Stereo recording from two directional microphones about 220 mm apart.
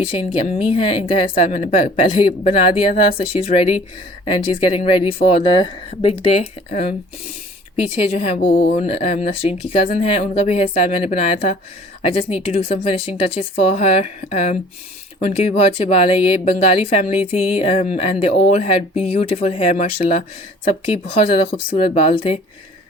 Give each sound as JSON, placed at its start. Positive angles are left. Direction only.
{"t": 0.0, "sound": "speech", "side_deg": 20}